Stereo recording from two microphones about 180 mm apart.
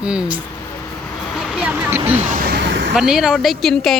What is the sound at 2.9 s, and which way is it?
Speech, 5° right (ahead or behind).